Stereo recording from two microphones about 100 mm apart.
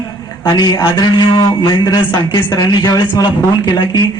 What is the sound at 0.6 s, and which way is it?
Speech, 45° left (ahead or behind).